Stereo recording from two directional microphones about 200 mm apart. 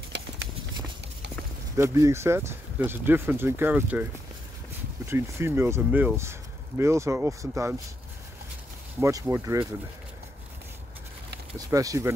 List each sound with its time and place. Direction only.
1.8 s speech: 15° right (ahead or behind)
9.0 s speech: 15° right (ahead or behind)
11.5 s speech: 15° right (ahead or behind)